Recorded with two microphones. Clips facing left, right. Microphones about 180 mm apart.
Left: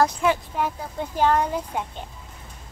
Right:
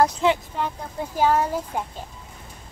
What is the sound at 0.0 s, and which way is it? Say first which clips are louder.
Speech: right 1 dB; 20° right (ahead or behind).